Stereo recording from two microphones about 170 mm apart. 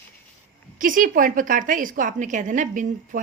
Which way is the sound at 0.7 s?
50° right (ahead or behind).